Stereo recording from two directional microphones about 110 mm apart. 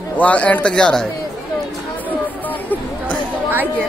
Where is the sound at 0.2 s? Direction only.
15° left (ahead or behind).